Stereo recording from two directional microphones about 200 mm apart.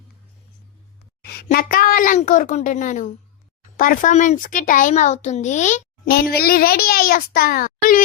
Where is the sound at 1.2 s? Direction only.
50° left (ahead or behind).